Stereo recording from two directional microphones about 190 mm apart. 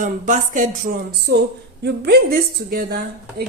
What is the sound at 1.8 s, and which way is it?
Speech, 60° right (ahead or behind).